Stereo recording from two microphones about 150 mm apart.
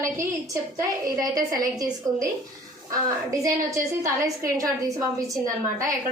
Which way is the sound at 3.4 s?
20° right (ahead or behind).